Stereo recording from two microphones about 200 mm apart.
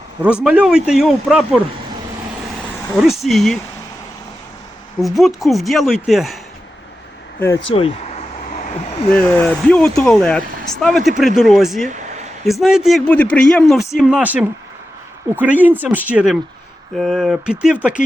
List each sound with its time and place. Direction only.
0.4 s speech: 5° right (ahead or behind)
4.9 s speech: centre (ahead or behind)
7.3 s speech: 10° left (ahead or behind)
7.7 s speech: 30° left (ahead or behind)
9.0 s speech: 5° left (ahead or behind)
11.9 s a sound: 35° right (ahead or behind)
12.5 s speech: centre (ahead or behind)